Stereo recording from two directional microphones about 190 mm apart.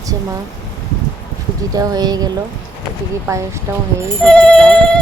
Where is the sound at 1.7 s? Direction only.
20° right (ahead or behind).